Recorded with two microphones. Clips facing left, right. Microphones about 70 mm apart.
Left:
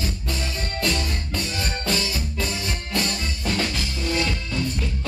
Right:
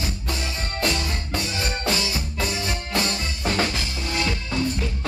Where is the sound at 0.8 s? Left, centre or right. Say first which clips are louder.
Right 1 dB; centre.